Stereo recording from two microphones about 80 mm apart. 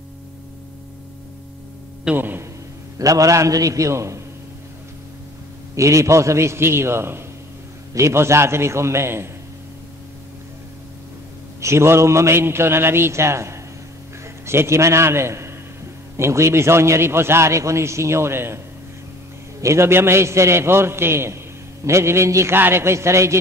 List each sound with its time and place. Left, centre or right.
2.1 s a sound: right
3.0 s a man's voice: right
5.8 s a man's voice: right
11.6 s a man's voice: right
19.6 s a man's voice: right